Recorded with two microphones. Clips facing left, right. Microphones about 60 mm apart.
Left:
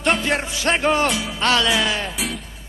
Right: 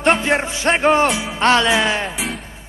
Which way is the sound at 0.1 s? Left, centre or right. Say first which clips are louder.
Right 3 dB; right.